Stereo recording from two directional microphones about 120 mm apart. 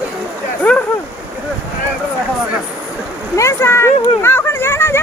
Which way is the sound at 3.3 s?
25° left (ahead or behind).